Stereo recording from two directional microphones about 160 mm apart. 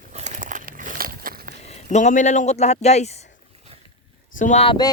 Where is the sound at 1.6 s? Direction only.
45° left (ahead or behind).